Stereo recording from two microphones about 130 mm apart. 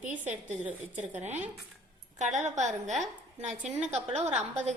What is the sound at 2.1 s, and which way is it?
Speech, 65° right (ahead or behind).